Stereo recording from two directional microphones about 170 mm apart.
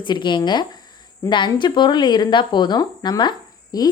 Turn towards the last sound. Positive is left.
turn(degrees=20)  # may be behind; listen again after turning